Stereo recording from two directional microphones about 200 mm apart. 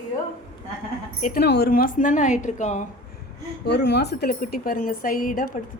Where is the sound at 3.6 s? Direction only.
55° left (ahead or behind).